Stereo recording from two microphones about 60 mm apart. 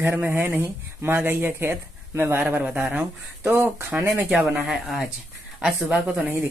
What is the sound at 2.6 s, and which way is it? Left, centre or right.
Speech, right.